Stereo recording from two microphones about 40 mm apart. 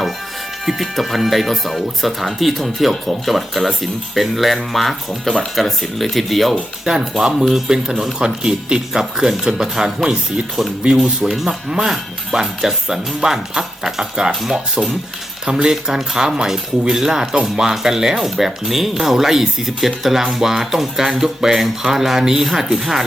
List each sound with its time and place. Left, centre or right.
0.6 s speech: centre
6.8 s speech: centre
11.2 s speech: centre